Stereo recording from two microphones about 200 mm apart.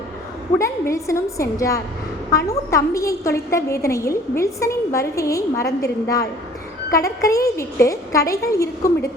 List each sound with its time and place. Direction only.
0.6 s a woman's voice: 15° left (ahead or behind)
6.9 s a woman's voice: 15° left (ahead or behind)